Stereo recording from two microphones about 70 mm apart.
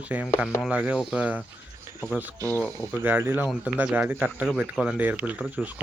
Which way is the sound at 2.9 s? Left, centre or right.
Right.